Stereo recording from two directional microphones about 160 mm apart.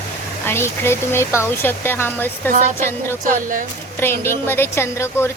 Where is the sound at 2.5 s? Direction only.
55° right (ahead or behind).